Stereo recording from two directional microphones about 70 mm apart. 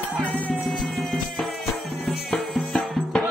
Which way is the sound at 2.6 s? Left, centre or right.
Centre.